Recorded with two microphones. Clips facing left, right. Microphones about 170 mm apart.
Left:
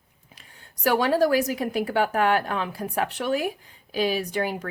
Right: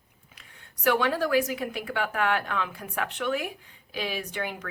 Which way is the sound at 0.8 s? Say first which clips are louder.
Left 4 dB; 35° left (ahead or behind).